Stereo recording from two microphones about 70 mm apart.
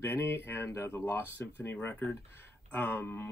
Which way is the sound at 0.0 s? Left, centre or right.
Left.